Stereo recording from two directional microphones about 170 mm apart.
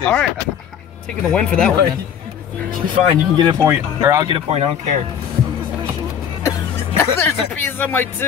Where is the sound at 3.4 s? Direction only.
25° right (ahead or behind).